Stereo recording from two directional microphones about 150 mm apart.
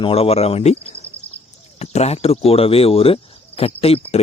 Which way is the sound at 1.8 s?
45° left (ahead or behind).